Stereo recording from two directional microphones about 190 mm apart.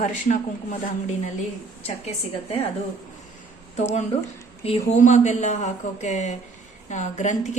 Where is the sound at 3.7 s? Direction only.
35° left (ahead or behind).